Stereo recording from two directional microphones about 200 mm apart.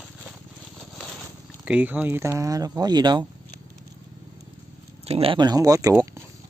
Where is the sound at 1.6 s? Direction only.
5° right (ahead or behind).